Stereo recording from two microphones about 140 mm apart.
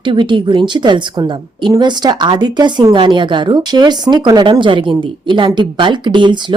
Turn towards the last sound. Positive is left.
turn(degrees=-35)  # may be behind; listen again after turning